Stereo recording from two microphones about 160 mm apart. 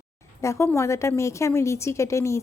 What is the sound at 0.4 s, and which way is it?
A woman's voice, 20° left (ahead or behind).